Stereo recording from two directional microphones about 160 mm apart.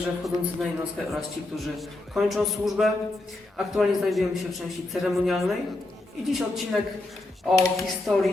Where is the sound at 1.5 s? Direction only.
Centre (ahead or behind).